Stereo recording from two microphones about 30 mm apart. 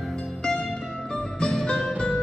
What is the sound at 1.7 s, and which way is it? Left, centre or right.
Music, left.